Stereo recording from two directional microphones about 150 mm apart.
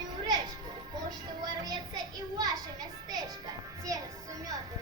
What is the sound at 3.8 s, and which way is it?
Music, 25° right (ahead or behind).